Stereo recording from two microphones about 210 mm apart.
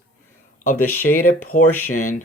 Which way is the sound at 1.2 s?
90° left.